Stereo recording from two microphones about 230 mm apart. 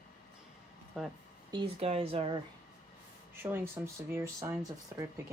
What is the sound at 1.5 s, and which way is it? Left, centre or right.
Speech, right.